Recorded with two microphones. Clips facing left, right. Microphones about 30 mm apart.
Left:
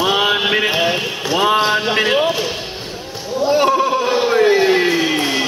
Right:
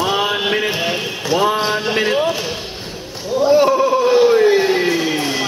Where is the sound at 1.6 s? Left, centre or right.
Centre.